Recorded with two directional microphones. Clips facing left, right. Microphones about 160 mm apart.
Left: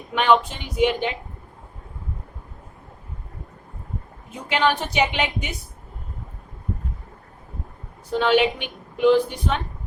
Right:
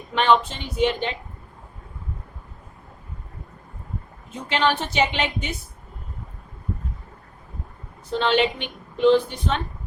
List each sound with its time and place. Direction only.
0.1 s speech: 10° left (ahead or behind)
4.3 s speech: 10° left (ahead or behind)
8.2 s speech: 10° left (ahead or behind)